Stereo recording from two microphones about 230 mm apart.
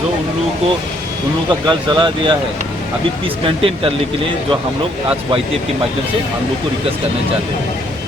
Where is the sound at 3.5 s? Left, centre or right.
Right.